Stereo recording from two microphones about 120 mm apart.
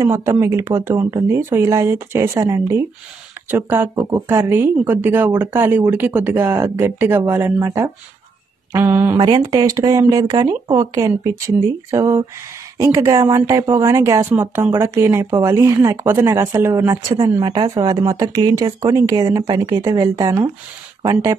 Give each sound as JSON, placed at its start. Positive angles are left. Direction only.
{"t": 0.0, "sound": "speech", "side_deg": -25}
{"t": 9.2, "sound": "speech", "side_deg": -35}
{"t": 17.2, "sound": "speech", "side_deg": -35}